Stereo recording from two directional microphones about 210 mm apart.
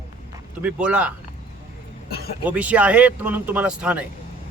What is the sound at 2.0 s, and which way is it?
Speech, 50° left (ahead or behind).